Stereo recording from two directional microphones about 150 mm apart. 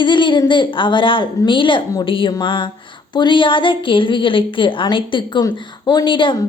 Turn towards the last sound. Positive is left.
turn(degrees=35)  # may be behind; listen again after turning